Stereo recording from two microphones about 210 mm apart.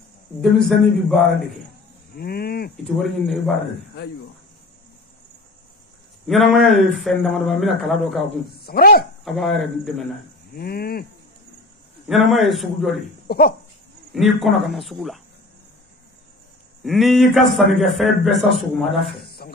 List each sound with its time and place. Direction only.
0.4 s a man's voice: centre (ahead or behind)
2.1 s livestock: 45° left (ahead or behind)
3.0 s a man's voice: centre (ahead or behind)
6.2 s a man's voice: centre (ahead or behind)
8.5 s livestock: 45° left (ahead or behind)
9.2 s a man's voice: centre (ahead or behind)
10.5 s livestock: 50° left (ahead or behind)
12.1 s a man's voice: centre (ahead or behind)
13.3 s livestock: 45° left (ahead or behind)
14.1 s a man's voice: centre (ahead or behind)
16.8 s a man's voice: centre (ahead or behind)
19.4 s music: 45° left (ahead or behind)